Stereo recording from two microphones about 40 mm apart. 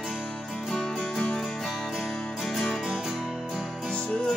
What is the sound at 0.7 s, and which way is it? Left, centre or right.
Music, centre.